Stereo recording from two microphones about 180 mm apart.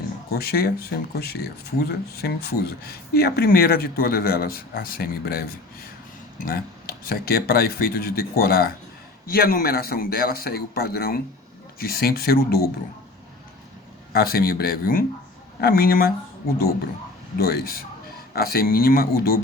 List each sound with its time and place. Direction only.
0.3 s speech: 60° left (ahead or behind)
14.1 s speech: 60° left (ahead or behind)
17.4 s speech: 55° left (ahead or behind)